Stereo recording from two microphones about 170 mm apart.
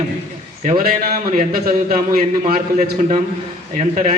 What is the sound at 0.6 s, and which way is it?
A man's voice, 50° right (ahead or behind).